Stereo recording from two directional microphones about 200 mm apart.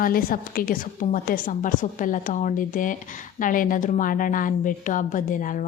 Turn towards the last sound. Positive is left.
turn(degrees=40)  # may be behind; listen again after turning